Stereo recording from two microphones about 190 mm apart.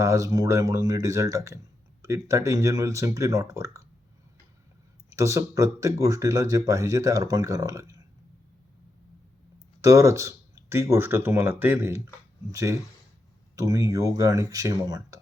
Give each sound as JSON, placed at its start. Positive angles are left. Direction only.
{"t": 0.0, "sound": "speech", "side_deg": -15}
{"t": 5.0, "sound": "speech", "side_deg": -15}
{"t": 9.8, "sound": "speech", "side_deg": -15}